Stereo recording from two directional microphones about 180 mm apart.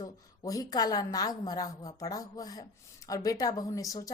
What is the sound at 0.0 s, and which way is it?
A woman's voice, 20° left (ahead or behind).